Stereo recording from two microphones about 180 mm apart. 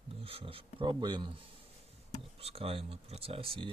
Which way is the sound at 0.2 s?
30° right (ahead or behind).